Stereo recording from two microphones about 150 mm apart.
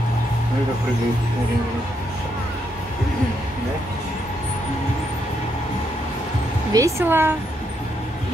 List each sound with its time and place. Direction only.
6.7 s speech: 20° right (ahead or behind)